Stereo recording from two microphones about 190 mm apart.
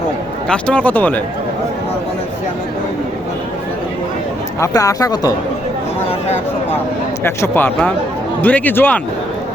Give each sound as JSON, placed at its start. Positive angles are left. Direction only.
{"t": 0.4, "sound": "speech", "side_deg": 5}
{"t": 4.6, "sound": "speech", "side_deg": 15}
{"t": 7.3, "sound": "speech", "side_deg": 10}